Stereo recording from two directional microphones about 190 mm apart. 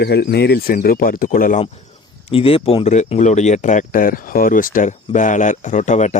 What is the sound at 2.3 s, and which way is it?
Speech, 30° left (ahead or behind).